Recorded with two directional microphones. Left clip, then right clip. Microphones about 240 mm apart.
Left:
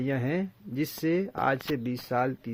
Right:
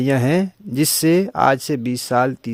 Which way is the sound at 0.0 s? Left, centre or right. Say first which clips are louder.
Right 12 dB; right.